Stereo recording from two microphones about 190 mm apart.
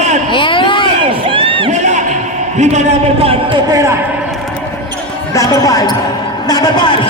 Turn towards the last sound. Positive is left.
turn(degrees=25)  # may be behind; listen again after turning